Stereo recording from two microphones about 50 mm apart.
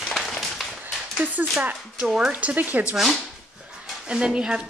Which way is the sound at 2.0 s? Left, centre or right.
Centre.